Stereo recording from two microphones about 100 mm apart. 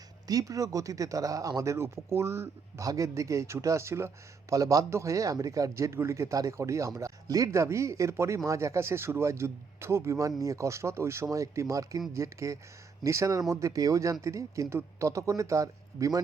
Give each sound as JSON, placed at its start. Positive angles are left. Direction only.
{"t": 0.3, "sound": "speech", "side_deg": -35}